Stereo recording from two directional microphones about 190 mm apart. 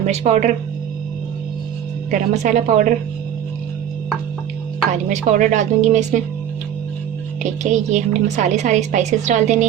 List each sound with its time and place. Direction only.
0.0 s a woman's voice: 35° right (ahead or behind)
2.0 s a woman's voice: 40° right (ahead or behind)
4.9 s a woman's voice: 40° right (ahead or behind)
7.6 s a woman's voice: 40° right (ahead or behind)